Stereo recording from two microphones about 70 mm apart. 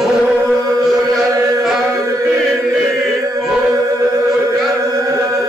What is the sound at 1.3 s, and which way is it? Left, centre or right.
Chant, right.